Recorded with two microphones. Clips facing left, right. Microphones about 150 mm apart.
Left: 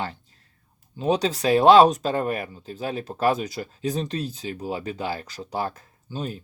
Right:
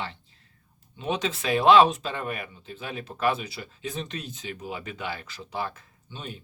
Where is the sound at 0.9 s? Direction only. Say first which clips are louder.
Left 6 dB; 35° left (ahead or behind).